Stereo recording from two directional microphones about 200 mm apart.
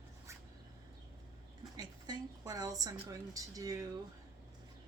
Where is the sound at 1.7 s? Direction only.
20° right (ahead or behind).